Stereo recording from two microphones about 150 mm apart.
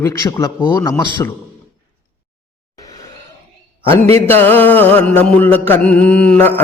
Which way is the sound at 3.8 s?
15° left (ahead or behind).